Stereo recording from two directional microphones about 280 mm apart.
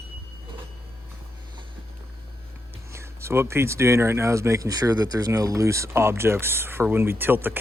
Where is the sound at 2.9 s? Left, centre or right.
Centre.